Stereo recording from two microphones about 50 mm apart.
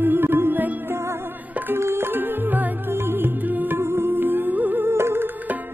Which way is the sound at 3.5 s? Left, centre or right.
Right.